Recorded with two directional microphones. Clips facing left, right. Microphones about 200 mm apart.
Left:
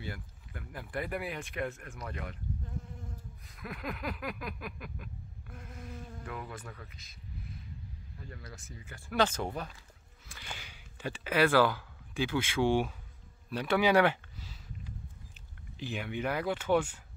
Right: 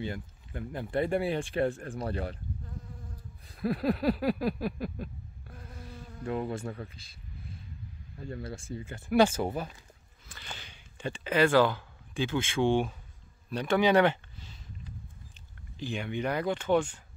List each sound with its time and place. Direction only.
0.0 s speech: 25° right (ahead or behind)
3.4 s a sound: 30° right (ahead or behind)
5.8 s insect: 30° right (ahead or behind)
8.2 s speech: 30° right (ahead or behind)
9.1 s speech: 10° right (ahead or behind)
10.2 s a sound: 10° left (ahead or behind)
13.5 s speech: 5° left (ahead or behind)
15.8 s speech: 5° left (ahead or behind)